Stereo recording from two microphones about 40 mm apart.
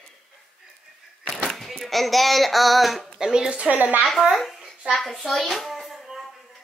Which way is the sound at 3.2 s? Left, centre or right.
Centre.